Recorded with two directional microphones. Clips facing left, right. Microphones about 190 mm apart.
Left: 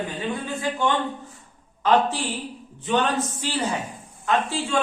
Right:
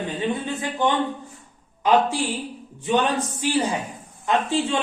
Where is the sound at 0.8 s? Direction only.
20° right (ahead or behind).